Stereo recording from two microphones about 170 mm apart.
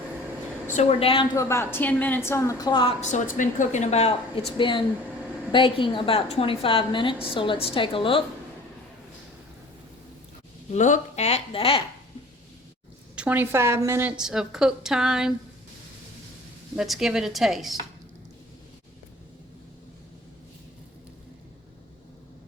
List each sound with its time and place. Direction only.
0.7 s a woman's voice: 40° left (ahead or behind)
1.4 s a woman's voice: 15° left (ahead or behind)
3.0 s a woman's voice: 45° left (ahead or behind)
4.5 s a woman's voice: 30° left (ahead or behind)
10.7 s a woman's voice: 45° left (ahead or behind)
13.1 s a woman's voice: 10° right (ahead or behind)
14.2 s a woman's voice: 5° right (ahead or behind)
16.7 s a woman's voice: centre (ahead or behind)